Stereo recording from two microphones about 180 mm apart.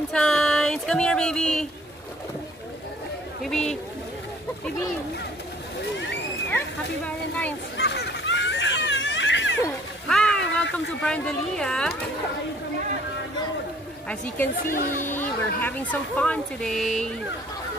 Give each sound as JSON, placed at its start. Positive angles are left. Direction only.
{"t": 0.1, "sound": "speech", "side_deg": 5}
{"t": 3.4, "sound": "speech", "side_deg": 0}
{"t": 7.7, "sound": "a sound", "side_deg": 70}
{"t": 10.0, "sound": "a sound", "side_deg": 5}
{"t": 11.0, "sound": "speech", "side_deg": 5}
{"t": 14.0, "sound": "speech", "side_deg": 5}